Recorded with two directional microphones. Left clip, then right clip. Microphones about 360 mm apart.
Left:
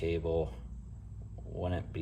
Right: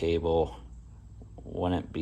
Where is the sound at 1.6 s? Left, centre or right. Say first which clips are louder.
Right 7 dB; right.